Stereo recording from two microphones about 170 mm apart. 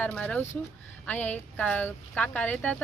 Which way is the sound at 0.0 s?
10° left (ahead or behind).